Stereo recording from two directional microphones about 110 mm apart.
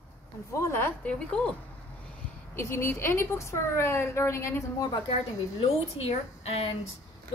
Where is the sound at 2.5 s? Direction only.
25° left (ahead or behind).